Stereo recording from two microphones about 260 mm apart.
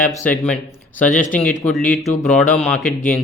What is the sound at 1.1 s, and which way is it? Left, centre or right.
Speech, left.